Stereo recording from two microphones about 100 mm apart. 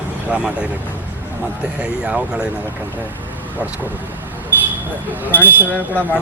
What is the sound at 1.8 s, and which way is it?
Speech, 10° right (ahead or behind).